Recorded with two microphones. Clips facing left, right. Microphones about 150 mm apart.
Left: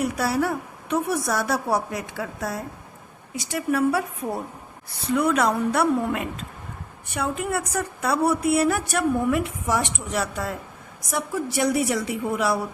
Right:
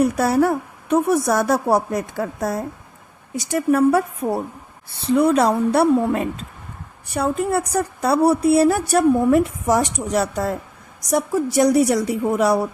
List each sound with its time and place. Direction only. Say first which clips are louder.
0.0 s a woman's voice: right 7 dB; 45° right (ahead or behind)
4.9 s a woman's voice: right 6 dB; 30° right (ahead or behind)